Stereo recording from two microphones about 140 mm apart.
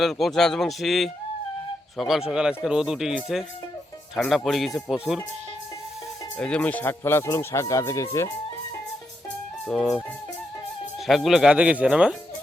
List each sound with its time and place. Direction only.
0.0 s speech: centre (ahead or behind)
6.3 s speech: 10° left (ahead or behind)
9.6 s speech: 5° left (ahead or behind)
11.0 s speech: centre (ahead or behind)